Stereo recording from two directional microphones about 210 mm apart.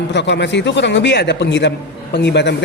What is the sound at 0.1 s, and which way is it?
Speech, 55° left (ahead or behind).